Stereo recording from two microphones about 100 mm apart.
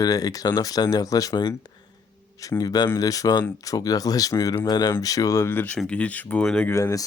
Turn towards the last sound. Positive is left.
turn(degrees=30)  # may be behind; listen again after turning